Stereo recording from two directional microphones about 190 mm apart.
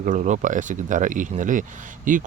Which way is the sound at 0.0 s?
40° right (ahead or behind).